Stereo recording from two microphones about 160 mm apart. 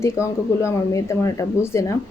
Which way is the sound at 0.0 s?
20° left (ahead or behind).